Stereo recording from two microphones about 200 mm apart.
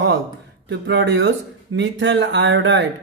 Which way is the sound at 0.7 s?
65° right (ahead or behind).